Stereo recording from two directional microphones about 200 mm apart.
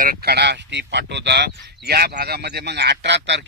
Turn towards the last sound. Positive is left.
turn(degrees=-60)  # may be behind; listen again after turning